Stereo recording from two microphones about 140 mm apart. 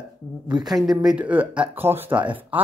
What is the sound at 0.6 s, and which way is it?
Speech, centre (ahead or behind).